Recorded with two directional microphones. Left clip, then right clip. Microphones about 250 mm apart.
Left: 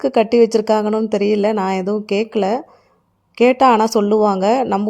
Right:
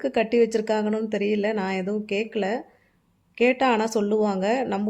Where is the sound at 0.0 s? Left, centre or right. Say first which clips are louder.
Left 8 dB; left.